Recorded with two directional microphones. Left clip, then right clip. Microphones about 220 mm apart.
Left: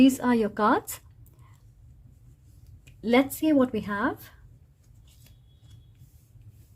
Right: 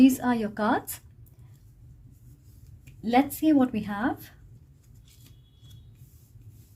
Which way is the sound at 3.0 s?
30° left (ahead or behind).